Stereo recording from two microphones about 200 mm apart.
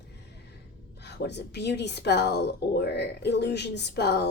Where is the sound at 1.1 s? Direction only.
60° left (ahead or behind).